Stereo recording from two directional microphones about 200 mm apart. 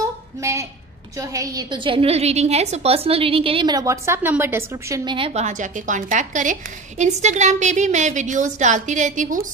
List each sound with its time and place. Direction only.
0.4 s a woman's voice: 15° right (ahead or behind); by 9.5 s 40° right (ahead or behind)